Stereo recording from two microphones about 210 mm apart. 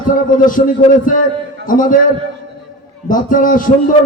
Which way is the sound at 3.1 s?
40° left (ahead or behind).